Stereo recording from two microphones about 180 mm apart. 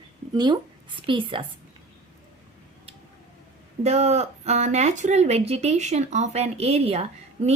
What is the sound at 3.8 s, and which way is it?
Speech, 35° right (ahead or behind).